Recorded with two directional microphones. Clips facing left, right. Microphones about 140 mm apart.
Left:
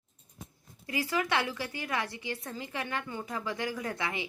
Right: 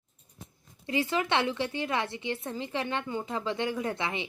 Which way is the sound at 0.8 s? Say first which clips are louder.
Right 3 dB; 25° right (ahead or behind).